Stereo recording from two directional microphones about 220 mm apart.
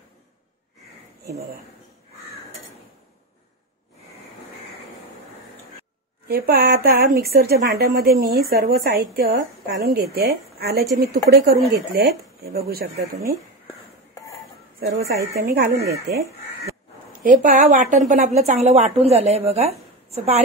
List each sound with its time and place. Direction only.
6.2 s a woman's voice: 45° right (ahead or behind)
15.4 s a woman's voice: 45° right (ahead or behind); by 20.4 s 30° right (ahead or behind)